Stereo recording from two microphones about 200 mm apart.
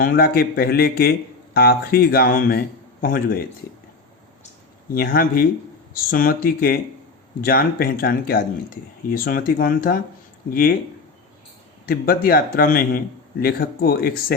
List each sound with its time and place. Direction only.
0.0 s speech: 50° left (ahead or behind)
4.9 s speech: 45° left (ahead or behind)
11.9 s speech: 45° left (ahead or behind)